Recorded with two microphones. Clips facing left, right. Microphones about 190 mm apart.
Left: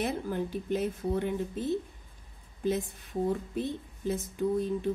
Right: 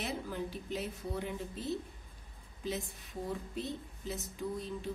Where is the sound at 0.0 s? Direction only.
55° left (ahead or behind).